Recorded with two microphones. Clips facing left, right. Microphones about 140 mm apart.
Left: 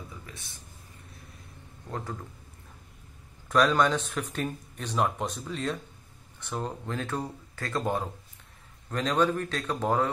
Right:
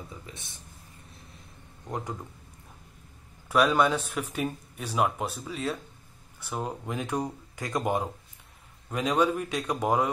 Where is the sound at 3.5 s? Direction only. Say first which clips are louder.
Even; 10° right (ahead or behind).